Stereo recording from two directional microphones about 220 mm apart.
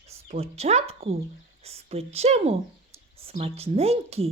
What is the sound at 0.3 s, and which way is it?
A woman's voice, 30° right (ahead or behind).